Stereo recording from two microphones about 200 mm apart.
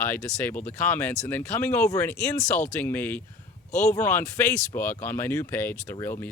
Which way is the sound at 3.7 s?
35° left (ahead or behind).